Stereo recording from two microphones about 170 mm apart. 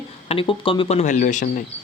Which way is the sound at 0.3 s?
30° left (ahead or behind).